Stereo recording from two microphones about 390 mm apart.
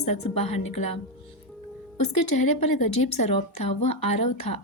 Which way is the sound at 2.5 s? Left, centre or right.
Left.